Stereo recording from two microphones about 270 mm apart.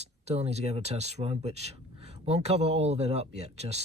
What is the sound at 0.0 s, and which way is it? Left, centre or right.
Speech, right.